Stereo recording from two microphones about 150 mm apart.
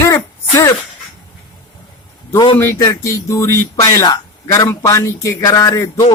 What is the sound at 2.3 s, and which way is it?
Speech, 30° left (ahead or behind).